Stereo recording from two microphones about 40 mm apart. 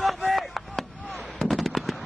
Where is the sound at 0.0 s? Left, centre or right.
Centre.